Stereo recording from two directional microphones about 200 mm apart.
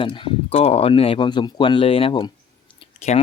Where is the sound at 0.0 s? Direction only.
25° left (ahead or behind).